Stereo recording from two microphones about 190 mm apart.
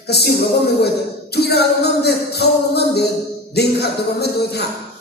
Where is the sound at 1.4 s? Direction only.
60° left (ahead or behind).